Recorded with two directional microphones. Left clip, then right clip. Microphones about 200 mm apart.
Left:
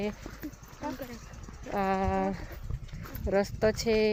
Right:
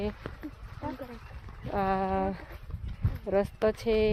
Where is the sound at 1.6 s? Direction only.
20° right (ahead or behind).